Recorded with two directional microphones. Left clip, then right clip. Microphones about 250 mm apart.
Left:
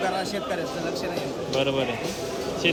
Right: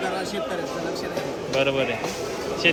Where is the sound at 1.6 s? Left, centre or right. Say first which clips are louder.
Right 2 dB; centre.